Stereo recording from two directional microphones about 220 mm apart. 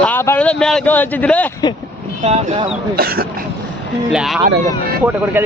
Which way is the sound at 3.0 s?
45° right (ahead or behind).